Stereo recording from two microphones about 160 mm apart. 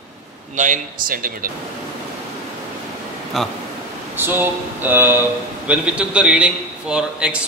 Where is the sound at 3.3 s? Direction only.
Centre (ahead or behind).